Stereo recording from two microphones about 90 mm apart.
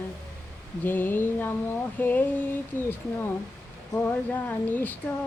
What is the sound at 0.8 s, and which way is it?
Speech, 20° left (ahead or behind).